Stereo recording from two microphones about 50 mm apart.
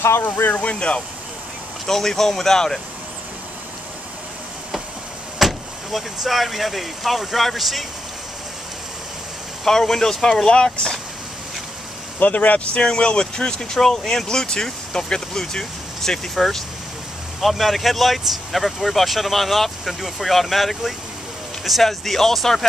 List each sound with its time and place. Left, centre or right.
0.0 s speech: left
0.4 s speech: left
1.9 s speech: centre
5.4 s speech: centre
9.7 s speech: centre
12.2 s speech: left; by 22.7 s centre